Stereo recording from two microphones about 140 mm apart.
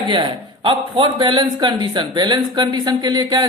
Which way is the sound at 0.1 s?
35° right (ahead or behind).